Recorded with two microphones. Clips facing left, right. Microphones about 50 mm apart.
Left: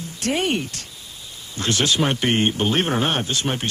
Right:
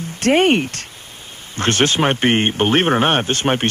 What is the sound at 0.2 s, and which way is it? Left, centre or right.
Speech, right.